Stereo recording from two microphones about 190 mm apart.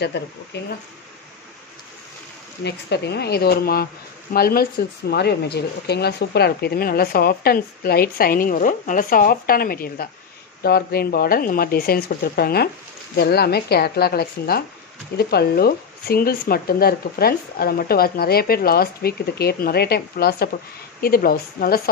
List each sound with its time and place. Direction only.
0.1 s speech: 65° left (ahead or behind)
2.6 s speech: 60° left (ahead or behind)